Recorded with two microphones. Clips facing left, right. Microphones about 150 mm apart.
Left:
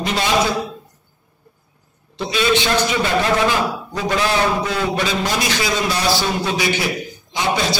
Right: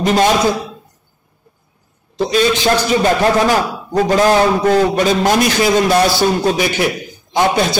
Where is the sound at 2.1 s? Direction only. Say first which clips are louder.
Right 4 dB; 40° right (ahead or behind).